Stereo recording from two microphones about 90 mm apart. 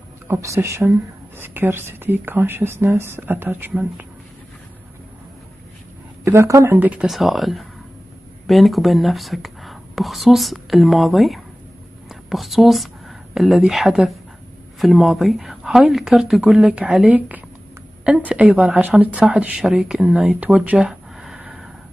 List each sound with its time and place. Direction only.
0.3 s a woman's voice: 30° right (ahead or behind)
6.2 s speech: 30° right (ahead or behind)
6.7 s a woman's voice: 15° right (ahead or behind)
7.1 s a woman's voice: centre (ahead or behind)
21.4 s vehicle: 10° right (ahead or behind)